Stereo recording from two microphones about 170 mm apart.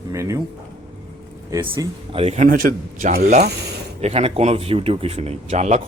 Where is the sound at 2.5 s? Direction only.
55° right (ahead or behind).